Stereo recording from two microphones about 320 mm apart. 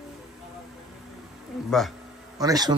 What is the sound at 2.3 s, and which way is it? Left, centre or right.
Speech, centre.